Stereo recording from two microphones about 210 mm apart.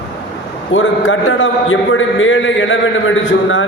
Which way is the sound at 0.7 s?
65° left (ahead or behind).